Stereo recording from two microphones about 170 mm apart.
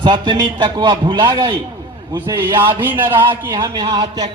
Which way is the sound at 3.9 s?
30° right (ahead or behind).